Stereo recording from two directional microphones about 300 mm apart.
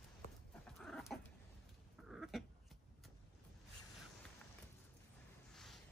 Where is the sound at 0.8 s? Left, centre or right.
Centre.